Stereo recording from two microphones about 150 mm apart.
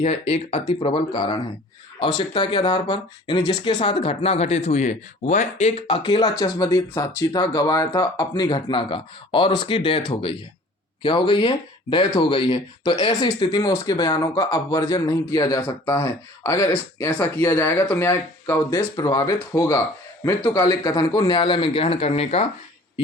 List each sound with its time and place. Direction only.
0.0 s a man's voice: 45° left (ahead or behind)